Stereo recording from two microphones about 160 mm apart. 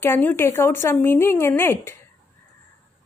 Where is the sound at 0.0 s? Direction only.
15° left (ahead or behind).